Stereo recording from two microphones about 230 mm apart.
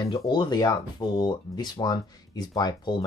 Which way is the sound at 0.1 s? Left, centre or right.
Centre.